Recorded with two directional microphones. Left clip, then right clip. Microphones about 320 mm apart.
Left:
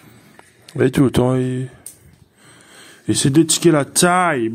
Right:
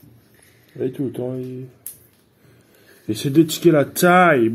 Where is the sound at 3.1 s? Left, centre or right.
Centre.